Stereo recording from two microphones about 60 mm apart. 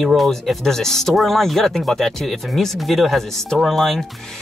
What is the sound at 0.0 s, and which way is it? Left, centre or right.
Speech, centre.